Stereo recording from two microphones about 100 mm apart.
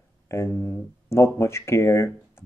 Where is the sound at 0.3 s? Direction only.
25° left (ahead or behind).